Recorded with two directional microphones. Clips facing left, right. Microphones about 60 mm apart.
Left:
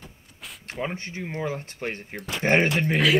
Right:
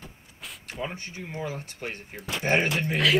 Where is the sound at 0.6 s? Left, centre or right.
Left.